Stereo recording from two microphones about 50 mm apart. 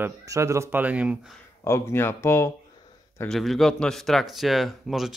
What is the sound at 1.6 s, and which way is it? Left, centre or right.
Speech, left.